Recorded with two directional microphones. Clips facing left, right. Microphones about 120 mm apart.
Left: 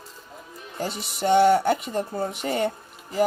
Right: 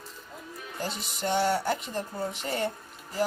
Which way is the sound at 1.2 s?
60° left (ahead or behind).